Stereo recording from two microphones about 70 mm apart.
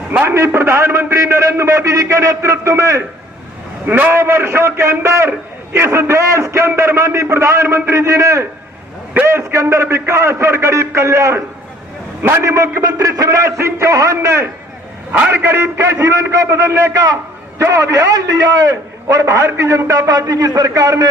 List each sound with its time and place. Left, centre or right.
0.1 s a man's voice: right
3.8 s a man's voice: right
4.1 s a man's voice: right
12.8 s a man's voice: right
15.1 s a man's voice: right
17.6 s a man's voice: right